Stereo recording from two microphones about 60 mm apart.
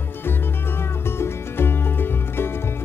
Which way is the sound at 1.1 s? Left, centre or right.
Left.